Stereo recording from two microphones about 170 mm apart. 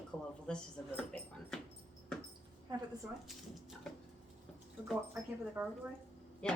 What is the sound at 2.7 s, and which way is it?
Speech, 25° right (ahead or behind).